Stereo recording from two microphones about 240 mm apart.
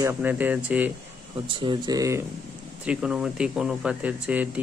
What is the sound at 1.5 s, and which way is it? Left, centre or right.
Speech, centre.